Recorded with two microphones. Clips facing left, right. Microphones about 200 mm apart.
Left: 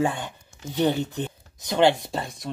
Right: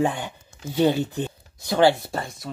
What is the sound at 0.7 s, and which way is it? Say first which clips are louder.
Speech: right 3 dB; 10° right (ahead or behind).